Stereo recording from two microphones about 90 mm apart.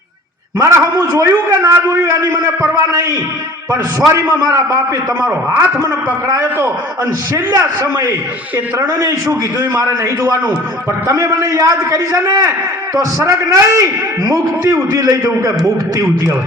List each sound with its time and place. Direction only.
0.6 s a man's voice: 30° right (ahead or behind)